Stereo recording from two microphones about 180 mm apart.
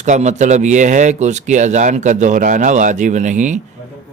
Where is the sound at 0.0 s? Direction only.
40° right (ahead or behind).